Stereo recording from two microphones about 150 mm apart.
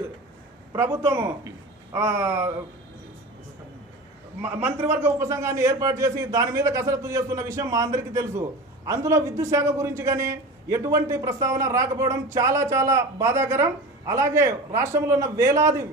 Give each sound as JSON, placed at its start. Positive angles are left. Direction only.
{"t": 1.0, "sound": "speech", "side_deg": -15}
{"t": 4.4, "sound": "a man's voice", "side_deg": -15}